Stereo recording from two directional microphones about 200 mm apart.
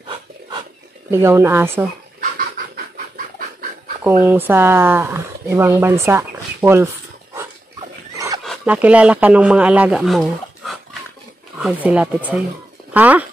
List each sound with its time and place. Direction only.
1.1 s speech: 10° right (ahead or behind)
2.1 s a sound: 45° right (ahead or behind)
4.2 s speech: 10° right (ahead or behind)
8.5 s speech: 5° right (ahead or behind)